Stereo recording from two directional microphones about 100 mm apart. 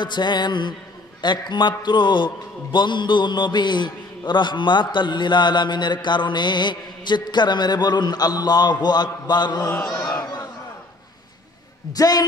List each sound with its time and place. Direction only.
0.0 s a man's voice: 50° left (ahead or behind)
10.0 s a sound: 40° left (ahead or behind)
11.9 s a man's voice: 40° left (ahead or behind)